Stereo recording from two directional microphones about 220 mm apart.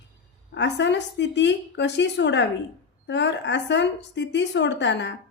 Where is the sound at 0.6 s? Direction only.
55° left (ahead or behind).